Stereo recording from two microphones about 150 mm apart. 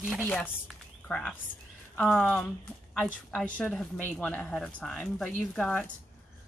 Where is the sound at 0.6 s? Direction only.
Centre (ahead or behind).